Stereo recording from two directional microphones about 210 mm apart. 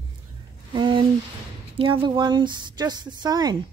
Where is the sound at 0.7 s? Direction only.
25° right (ahead or behind).